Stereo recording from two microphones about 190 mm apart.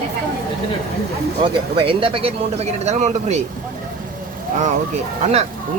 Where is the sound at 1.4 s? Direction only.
30° right (ahead or behind).